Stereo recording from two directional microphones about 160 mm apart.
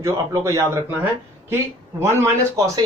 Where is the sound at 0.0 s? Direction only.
20° right (ahead or behind).